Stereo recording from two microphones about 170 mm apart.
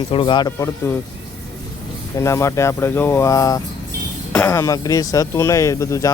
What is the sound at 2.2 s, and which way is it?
Speech, 15° left (ahead or behind).